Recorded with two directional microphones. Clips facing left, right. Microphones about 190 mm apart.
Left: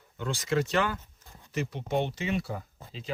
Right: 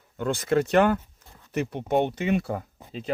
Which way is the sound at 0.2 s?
55° right (ahead or behind).